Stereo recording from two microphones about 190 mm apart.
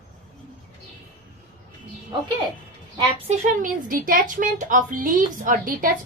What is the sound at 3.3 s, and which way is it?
Speech, 40° right (ahead or behind).